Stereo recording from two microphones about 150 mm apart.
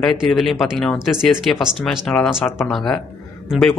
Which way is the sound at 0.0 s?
Centre (ahead or behind).